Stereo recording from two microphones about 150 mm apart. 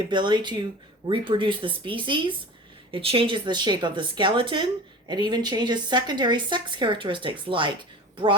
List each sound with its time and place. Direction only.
0.1 s a woman's voice: 30° right (ahead or behind)